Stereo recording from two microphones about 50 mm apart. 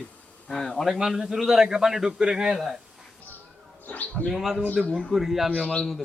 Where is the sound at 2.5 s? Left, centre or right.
Centre.